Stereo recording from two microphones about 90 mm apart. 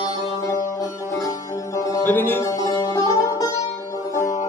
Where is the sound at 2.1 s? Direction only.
25° left (ahead or behind).